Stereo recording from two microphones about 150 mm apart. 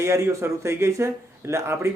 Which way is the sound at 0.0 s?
20° right (ahead or behind).